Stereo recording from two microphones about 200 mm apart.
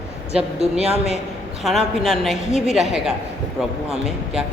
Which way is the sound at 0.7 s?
30° left (ahead or behind).